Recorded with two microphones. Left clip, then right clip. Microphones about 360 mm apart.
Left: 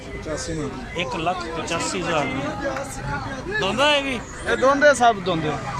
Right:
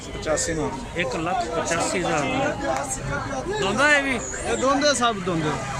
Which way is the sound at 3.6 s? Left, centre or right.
Centre.